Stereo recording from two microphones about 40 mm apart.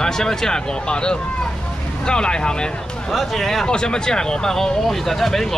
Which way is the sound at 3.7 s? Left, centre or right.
Left.